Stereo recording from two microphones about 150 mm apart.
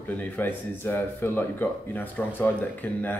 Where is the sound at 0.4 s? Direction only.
15° left (ahead or behind).